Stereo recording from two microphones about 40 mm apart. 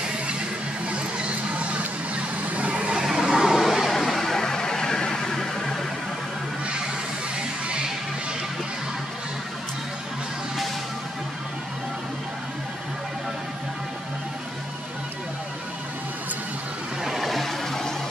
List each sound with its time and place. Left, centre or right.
0.8 s vehicle: right
3.1 s a sound: centre
3.5 s vehicle: centre
17.0 s vehicle: centre